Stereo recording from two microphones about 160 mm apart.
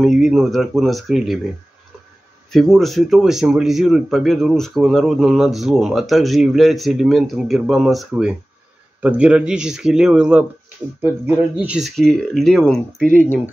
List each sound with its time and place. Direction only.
0.0 s speech: centre (ahead or behind)
2.5 s speech: centre (ahead or behind)
12.0 s speech: 5° left (ahead or behind)